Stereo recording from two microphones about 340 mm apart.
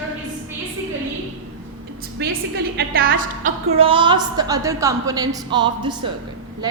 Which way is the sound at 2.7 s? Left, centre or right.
Right.